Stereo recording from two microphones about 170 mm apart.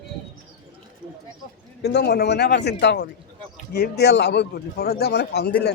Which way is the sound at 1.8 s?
75° left (ahead or behind).